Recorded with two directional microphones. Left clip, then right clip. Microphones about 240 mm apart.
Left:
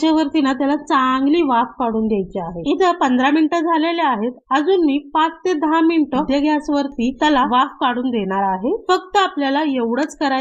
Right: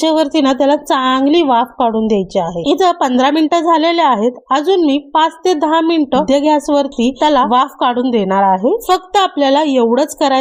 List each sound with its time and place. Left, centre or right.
0.0 s a woman's voice: right